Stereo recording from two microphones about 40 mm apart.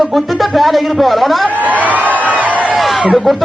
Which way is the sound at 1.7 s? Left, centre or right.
Right.